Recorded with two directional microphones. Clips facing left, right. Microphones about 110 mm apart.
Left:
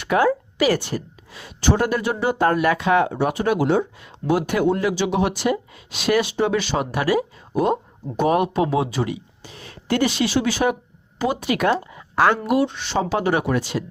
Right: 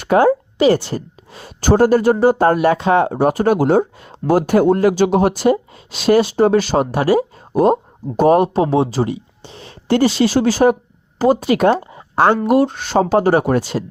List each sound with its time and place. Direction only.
0.0 s a woman's voice: 35° right (ahead or behind)
11.8 s a sound: 30° right (ahead or behind)
12.5 s a woman's voice: 40° right (ahead or behind)